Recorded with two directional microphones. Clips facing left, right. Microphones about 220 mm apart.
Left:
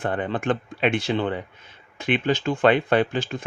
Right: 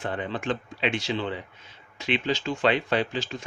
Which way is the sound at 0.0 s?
55° left (ahead or behind).